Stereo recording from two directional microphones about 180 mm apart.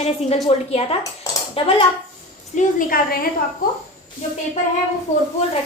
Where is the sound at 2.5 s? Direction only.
50° left (ahead or behind).